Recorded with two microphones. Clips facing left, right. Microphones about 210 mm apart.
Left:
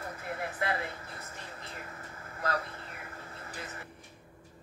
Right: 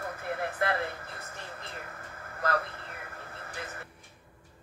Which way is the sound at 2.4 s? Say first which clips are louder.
Right 3 dB; 60° right (ahead or behind).